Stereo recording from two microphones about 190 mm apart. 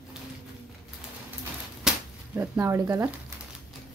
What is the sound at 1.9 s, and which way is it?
Speech, 10° right (ahead or behind).